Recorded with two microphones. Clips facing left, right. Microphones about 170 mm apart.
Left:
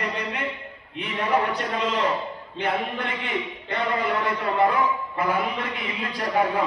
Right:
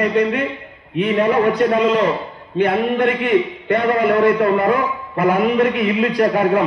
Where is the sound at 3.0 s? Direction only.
60° right (ahead or behind).